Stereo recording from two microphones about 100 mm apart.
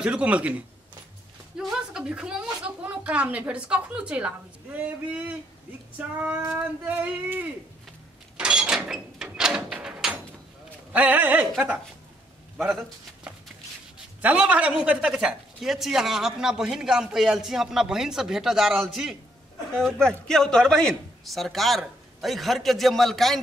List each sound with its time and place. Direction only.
0.0 s speech: 10° right (ahead or behind)
1.6 s speech: 5° right (ahead or behind)
8.4 s a sound: 10° right (ahead or behind)
10.9 s speech: 15° right (ahead or behind)
13.9 s a man's voice: 15° right (ahead or behind)